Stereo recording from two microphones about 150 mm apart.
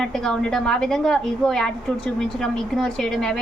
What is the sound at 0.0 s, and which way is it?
A woman's voice, centre (ahead or behind).